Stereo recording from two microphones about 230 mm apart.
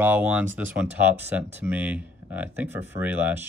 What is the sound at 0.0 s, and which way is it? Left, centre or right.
Speech, centre.